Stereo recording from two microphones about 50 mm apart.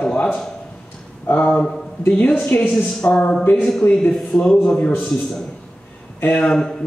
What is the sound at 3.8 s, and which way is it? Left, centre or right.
Speech, left.